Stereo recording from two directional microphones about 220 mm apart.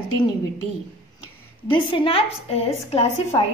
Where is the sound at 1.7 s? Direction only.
25° left (ahead or behind).